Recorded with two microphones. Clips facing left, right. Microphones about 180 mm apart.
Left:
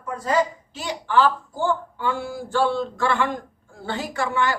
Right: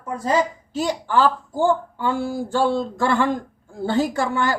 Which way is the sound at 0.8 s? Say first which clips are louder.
Right 2 dB; 40° right (ahead or behind).